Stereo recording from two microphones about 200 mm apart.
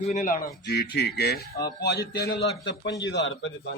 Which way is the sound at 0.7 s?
55° left (ahead or behind).